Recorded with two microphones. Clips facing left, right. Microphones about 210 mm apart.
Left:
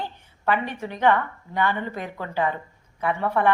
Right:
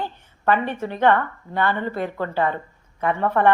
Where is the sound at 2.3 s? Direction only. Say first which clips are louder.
Even; 10° left (ahead or behind).